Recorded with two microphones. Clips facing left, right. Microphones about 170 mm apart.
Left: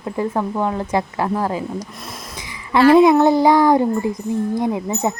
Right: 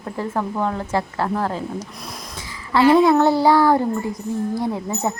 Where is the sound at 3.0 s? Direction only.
15° left (ahead or behind).